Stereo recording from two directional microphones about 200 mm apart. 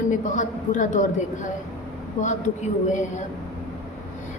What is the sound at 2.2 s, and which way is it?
Speech, 40° left (ahead or behind).